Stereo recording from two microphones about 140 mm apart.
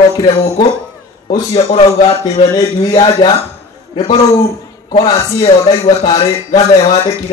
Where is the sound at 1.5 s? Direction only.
45° left (ahead or behind).